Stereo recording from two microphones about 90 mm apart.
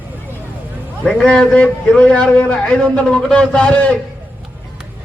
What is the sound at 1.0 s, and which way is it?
A man's voice, 10° left (ahead or behind).